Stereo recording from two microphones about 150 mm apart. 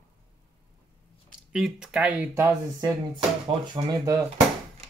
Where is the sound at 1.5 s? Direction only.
5° right (ahead or behind).